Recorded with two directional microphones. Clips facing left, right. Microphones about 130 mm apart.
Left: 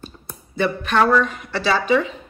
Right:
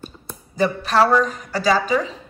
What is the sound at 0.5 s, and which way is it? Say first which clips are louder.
A woman's voice: right 1 dB; 35° right (ahead or behind).